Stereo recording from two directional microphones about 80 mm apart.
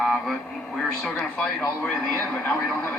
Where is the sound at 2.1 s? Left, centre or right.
Left.